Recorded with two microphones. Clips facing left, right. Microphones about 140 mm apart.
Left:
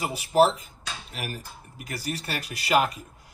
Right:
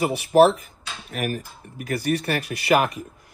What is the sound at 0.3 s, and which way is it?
Speech, 55° right (ahead or behind).